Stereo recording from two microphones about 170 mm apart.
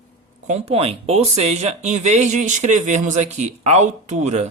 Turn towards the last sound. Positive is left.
turn(degrees=-40)  # may be behind; listen again after turning